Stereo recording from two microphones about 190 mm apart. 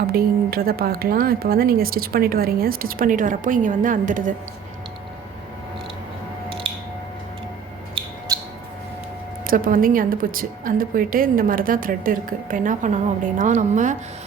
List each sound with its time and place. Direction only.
0.1 s speech: 50° right (ahead or behind)
9.5 s a woman's voice: 50° right (ahead or behind)